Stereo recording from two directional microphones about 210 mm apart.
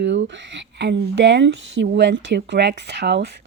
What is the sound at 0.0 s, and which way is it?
Speech, 60° right (ahead or behind).